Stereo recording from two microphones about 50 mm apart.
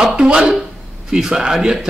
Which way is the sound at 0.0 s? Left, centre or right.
Centre.